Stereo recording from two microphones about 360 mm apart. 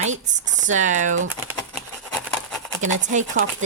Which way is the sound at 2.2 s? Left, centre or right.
Centre.